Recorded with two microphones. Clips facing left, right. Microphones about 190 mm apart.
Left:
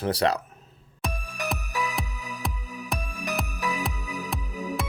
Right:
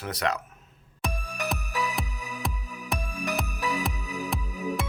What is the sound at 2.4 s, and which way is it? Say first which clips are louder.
Music: left 1 dB; centre (ahead or behind).